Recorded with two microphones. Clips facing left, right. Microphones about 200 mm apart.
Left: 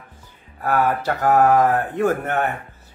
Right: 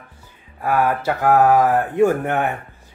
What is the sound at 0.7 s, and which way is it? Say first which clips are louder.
A man's voice: right 1 dB; 10° right (ahead or behind).